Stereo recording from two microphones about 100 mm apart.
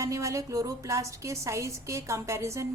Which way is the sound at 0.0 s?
30° right (ahead or behind).